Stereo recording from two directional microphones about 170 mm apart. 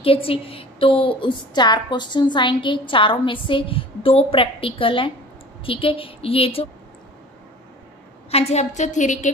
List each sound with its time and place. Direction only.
0.0 s a woman's voice: 35° left (ahead or behind)
8.3 s a woman's voice: 40° left (ahead or behind)